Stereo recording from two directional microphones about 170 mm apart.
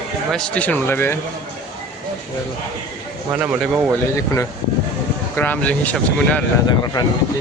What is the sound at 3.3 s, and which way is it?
Speech, 10° right (ahead or behind).